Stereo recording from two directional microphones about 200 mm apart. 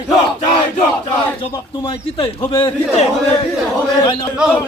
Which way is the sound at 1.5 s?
25° left (ahead or behind).